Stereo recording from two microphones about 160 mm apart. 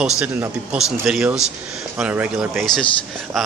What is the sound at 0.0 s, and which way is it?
Speech, 10° right (ahead or behind).